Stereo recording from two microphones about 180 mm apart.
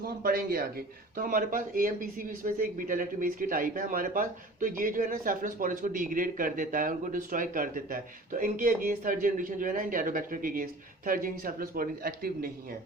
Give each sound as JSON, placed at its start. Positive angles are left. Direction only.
{"t": 0.0, "sound": "speech", "side_deg": -55}